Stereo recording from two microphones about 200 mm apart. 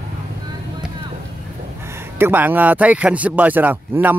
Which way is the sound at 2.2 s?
10° right (ahead or behind).